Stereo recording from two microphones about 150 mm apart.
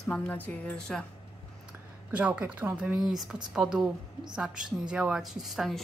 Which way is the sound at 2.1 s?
10° right (ahead or behind).